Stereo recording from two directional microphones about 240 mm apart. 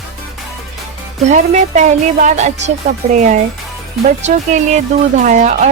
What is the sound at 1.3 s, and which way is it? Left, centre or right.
Speech, right.